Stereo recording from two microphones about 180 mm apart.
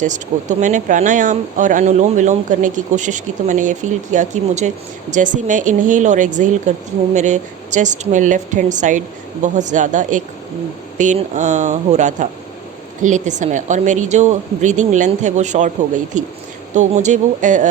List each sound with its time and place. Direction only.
0.0 s speech: 45° right (ahead or behind)